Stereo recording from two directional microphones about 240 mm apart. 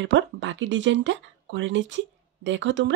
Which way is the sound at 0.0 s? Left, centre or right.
Right.